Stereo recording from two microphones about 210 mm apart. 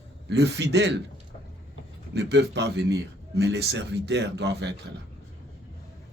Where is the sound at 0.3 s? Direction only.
55° right (ahead or behind).